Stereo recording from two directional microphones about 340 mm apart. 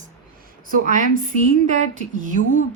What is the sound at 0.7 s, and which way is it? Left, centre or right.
Speech, right.